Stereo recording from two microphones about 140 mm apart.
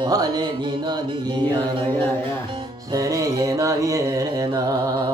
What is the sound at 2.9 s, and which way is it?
Music, 25° right (ahead or behind).